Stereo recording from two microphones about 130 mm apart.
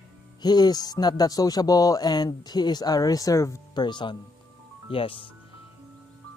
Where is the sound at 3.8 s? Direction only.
35° left (ahead or behind).